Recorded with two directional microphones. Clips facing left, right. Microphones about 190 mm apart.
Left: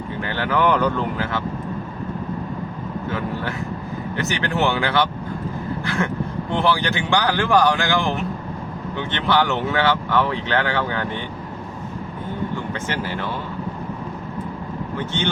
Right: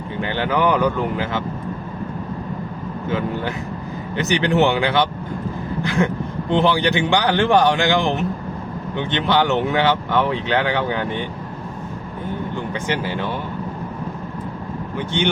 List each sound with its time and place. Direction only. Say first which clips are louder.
0.2 s speech: right 2 dB; 20° right (ahead or behind)
4.2 s speech: right 5 dB; 20° right (ahead or behind)
12.7 s speech: right 3 dB; 15° right (ahead or behind)
14.9 s speech: right 4 dB; 15° right (ahead or behind)